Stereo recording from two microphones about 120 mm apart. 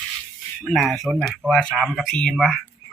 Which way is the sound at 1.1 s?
10° right (ahead or behind).